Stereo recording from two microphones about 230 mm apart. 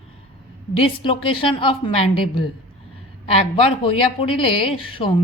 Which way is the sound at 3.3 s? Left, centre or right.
Left.